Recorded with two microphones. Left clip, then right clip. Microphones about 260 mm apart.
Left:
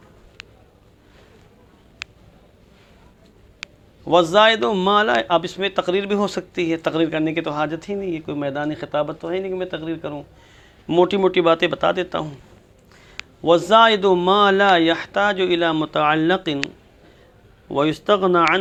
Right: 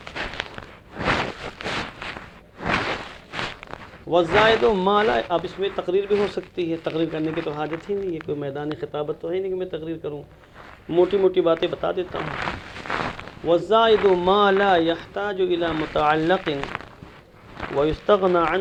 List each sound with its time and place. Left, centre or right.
4.1 s a man's voice: left
17.7 s speech: left